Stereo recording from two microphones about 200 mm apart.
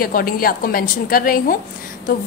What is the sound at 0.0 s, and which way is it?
A woman's voice, 45° left (ahead or behind).